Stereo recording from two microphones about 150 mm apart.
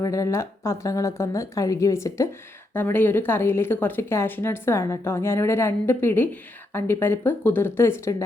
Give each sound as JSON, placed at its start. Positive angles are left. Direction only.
{"t": 0.0, "sound": "a woman's voice", "side_deg": 20}